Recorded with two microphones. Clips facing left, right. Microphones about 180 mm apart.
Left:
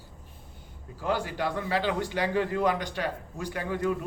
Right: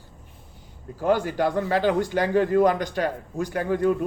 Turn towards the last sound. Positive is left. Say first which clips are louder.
# right 7 dB
turn(degrees=-45)  # may be behind; listen again after turning